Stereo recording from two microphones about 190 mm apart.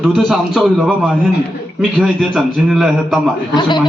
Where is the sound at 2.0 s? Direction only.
Centre (ahead or behind).